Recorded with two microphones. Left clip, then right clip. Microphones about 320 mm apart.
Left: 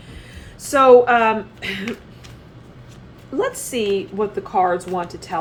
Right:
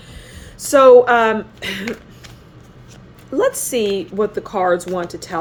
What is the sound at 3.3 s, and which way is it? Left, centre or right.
A woman's voice, right.